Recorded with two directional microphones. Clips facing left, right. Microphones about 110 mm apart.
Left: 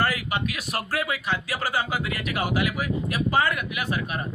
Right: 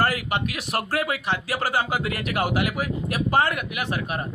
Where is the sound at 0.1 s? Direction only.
50° right (ahead or behind).